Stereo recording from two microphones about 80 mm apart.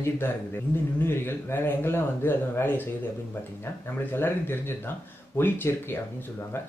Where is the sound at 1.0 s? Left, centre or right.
Left.